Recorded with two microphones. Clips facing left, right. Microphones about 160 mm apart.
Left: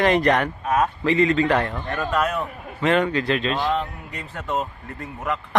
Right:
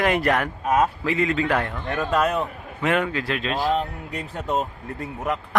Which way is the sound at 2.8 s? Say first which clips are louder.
Left 3 dB; 10° right (ahead or behind).